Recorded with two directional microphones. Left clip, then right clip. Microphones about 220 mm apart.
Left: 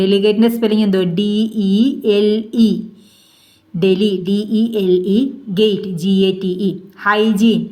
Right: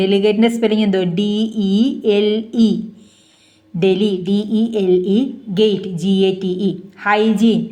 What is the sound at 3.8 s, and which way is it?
A woman's voice, 15° left (ahead or behind).